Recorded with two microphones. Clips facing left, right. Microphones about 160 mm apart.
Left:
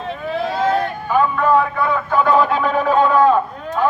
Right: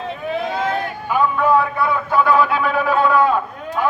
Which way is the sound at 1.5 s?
10° right (ahead or behind).